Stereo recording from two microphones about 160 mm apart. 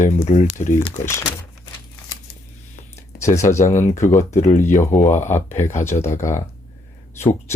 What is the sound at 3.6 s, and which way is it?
Speech, 50° left (ahead or behind).